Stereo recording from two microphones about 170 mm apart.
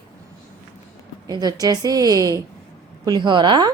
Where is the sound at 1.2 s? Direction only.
20° right (ahead or behind).